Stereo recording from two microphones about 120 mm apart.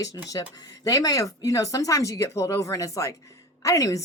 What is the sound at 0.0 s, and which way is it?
Speech, 30° left (ahead or behind).